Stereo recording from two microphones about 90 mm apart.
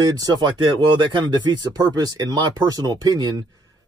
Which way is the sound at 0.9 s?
55° right (ahead or behind).